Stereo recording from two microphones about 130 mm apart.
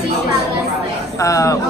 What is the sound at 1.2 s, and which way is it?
Speech, 25° left (ahead or behind).